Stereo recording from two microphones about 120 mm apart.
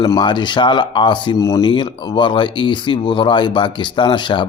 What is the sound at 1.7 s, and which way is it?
Speech, 40° left (ahead or behind).